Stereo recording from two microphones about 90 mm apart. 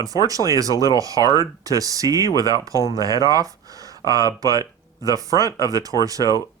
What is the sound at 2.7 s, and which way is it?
Speech, 40° left (ahead or behind).